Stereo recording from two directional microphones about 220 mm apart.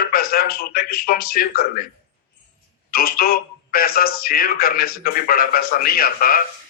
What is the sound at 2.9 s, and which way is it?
Speech, 45° left (ahead or behind).